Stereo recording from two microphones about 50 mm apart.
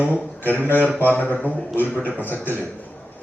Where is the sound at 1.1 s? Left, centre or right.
Left.